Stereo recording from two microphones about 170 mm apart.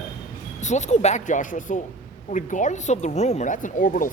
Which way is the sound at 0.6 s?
45° left (ahead or behind).